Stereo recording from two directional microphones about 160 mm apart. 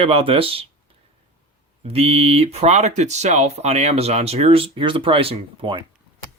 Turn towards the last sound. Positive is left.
turn(degrees=-30)  # may be behind; listen again after turning